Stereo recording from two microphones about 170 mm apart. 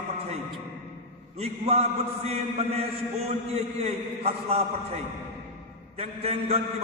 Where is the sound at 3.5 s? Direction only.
35° right (ahead or behind).